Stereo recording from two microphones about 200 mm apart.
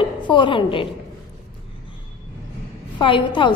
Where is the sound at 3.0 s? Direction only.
25° left (ahead or behind).